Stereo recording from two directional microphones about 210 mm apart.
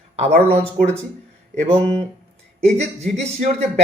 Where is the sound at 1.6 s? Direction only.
30° right (ahead or behind).